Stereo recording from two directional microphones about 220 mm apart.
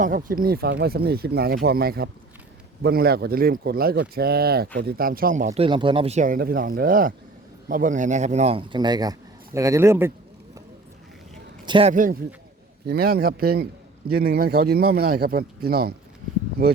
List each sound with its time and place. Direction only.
0.0 s a man's voice: 40° right (ahead or behind); by 10.1 s 10° right (ahead or behind)
11.6 s a man's voice: 25° right (ahead or behind)
12.8 s speech: 45° right (ahead or behind)